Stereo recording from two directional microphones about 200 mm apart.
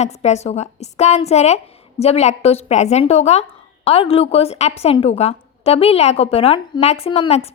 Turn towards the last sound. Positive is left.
turn(degrees=30)  # may be behind; listen again after turning